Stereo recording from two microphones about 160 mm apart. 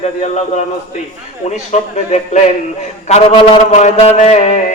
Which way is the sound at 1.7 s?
50° left (ahead or behind).